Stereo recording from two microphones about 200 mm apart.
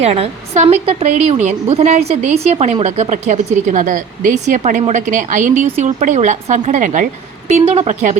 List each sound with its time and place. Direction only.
0.0 s a woman's voice: 30° right (ahead or behind)